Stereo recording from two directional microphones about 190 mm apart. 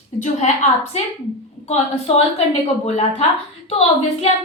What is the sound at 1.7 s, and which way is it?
Speech, 35° left (ahead or behind).